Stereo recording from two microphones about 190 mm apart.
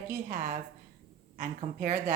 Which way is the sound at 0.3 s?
45° right (ahead or behind).